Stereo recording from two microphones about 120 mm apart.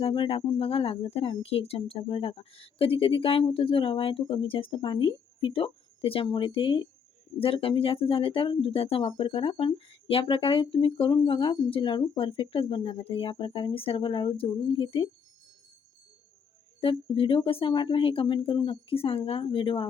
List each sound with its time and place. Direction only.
0.0 s speech: 50° left (ahead or behind)
16.8 s speech: 45° left (ahead or behind)